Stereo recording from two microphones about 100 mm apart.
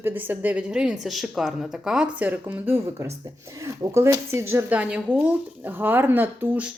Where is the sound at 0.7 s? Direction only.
5° right (ahead or behind); by 4.6 s 25° right (ahead or behind).